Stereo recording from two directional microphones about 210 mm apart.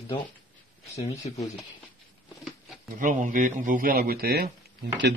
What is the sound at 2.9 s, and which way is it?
Speech, 40° right (ahead or behind).